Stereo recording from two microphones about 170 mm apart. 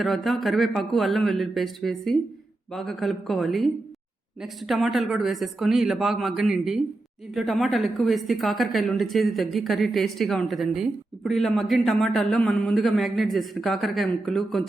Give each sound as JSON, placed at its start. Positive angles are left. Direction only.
{"t": 0.0, "sound": "a woman's voice", "side_deg": 0}